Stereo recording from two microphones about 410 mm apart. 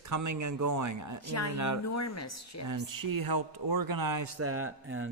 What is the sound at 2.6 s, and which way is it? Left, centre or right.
Speech, right.